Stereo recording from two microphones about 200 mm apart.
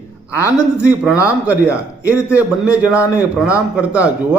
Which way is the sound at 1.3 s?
5° right (ahead or behind).